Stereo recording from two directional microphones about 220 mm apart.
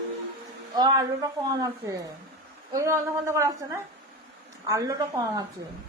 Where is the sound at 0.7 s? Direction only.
15° right (ahead or behind).